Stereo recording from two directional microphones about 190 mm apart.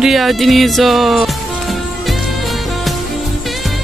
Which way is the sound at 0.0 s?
Centre (ahead or behind).